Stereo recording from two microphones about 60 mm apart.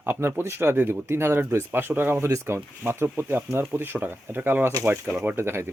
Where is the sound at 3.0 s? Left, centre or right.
Right.